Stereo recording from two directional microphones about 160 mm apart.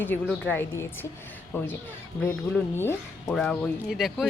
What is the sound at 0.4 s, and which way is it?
A woman's voice, 15° left (ahead or behind).